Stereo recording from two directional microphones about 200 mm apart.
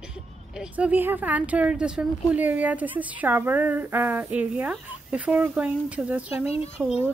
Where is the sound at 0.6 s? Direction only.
5° right (ahead or behind).